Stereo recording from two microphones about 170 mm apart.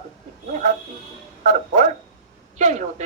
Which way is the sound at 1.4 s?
50° right (ahead or behind).